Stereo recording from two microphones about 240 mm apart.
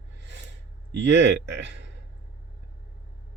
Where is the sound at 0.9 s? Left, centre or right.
Right.